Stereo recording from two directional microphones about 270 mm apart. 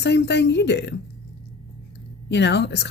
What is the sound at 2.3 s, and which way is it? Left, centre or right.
Speech, left.